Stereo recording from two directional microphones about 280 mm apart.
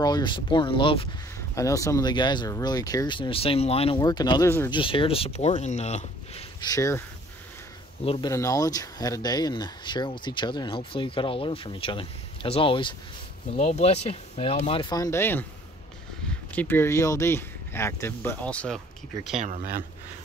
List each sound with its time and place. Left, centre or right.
0.0 s speech: centre
8.0 s speech: centre
16.5 s speech: centre
19.3 s speech: right